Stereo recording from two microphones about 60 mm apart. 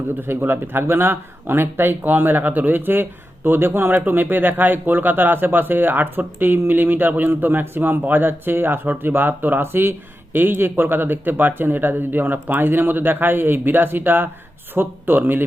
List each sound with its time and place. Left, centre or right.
0.2 s speech: right